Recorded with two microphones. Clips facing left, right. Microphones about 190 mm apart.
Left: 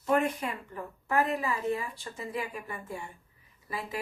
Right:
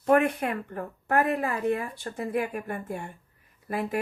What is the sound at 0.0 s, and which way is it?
Speech, 60° right (ahead or behind).